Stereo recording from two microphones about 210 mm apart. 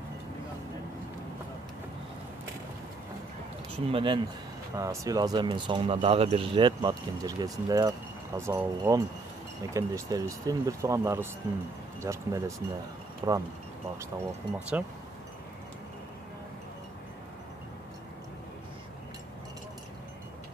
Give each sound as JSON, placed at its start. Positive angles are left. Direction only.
{"t": 3.8, "sound": "speech", "side_deg": -25}
{"t": 14.8, "sound": "speech", "side_deg": -10}